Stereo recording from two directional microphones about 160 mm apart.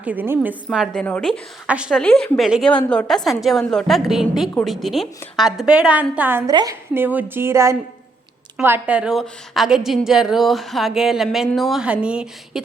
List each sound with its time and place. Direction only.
0.0 s a woman's voice: 10° right (ahead or behind)
2.0 s a woman's voice: 5° left (ahead or behind); by 6.4 s 10° right (ahead or behind)
6.5 s a woman's voice: 25° right (ahead or behind)
6.9 s a woman's voice: 10° right (ahead or behind)